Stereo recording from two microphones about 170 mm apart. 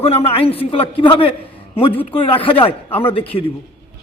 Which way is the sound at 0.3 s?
35° left (ahead or behind).